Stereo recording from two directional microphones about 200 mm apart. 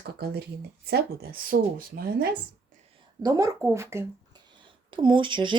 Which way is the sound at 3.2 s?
15° right (ahead or behind).